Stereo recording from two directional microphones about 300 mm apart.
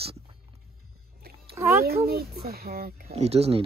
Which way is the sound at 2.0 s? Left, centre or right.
Right.